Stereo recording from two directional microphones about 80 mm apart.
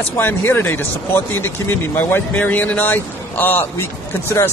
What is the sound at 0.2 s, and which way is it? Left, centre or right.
Speech, left.